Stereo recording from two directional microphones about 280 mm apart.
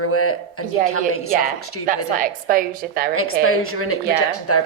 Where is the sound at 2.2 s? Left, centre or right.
Right.